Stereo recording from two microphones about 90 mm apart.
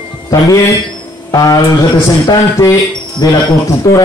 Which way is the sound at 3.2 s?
45° left (ahead or behind).